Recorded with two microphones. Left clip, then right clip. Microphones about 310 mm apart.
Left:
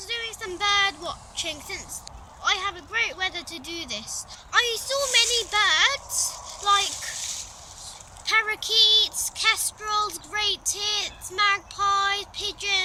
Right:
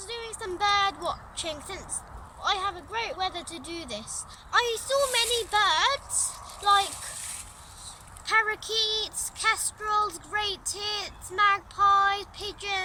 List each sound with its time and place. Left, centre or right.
0.0 s a sound: centre
2.4 s speech: centre
8.2 s speech: centre